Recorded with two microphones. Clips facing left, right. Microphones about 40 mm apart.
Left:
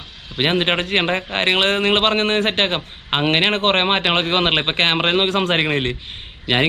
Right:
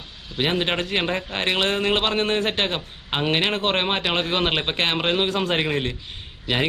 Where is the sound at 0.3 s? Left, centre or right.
Left.